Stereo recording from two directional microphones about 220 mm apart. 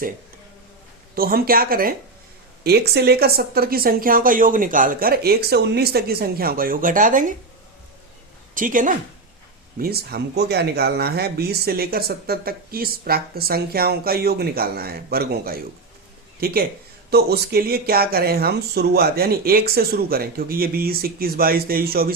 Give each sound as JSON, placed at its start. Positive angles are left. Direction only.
{"t": 1.1, "sound": "speech", "side_deg": -40}
{"t": 8.5, "sound": "speech", "side_deg": -35}